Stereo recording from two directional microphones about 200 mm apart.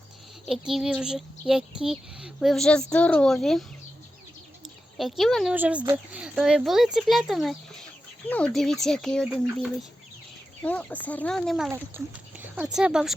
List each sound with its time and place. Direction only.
0.4 s speech: centre (ahead or behind)
4.9 s speech: centre (ahead or behind)
11.7 s speech: 10° right (ahead or behind)